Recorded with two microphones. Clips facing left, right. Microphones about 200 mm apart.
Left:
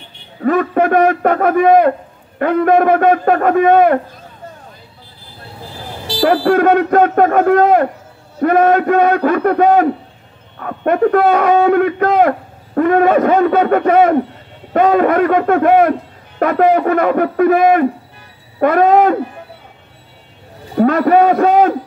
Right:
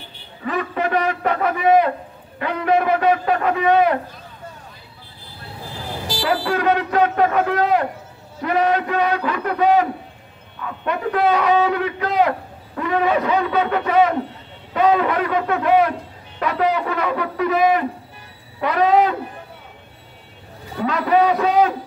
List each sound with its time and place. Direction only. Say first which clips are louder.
0.4 s a man's voice: left 10 dB; 50° left (ahead or behind)
6.2 s a man's voice: left 8 dB; 55° left (ahead or behind)
20.7 s a man's voice: left 7 dB; 50° left (ahead or behind)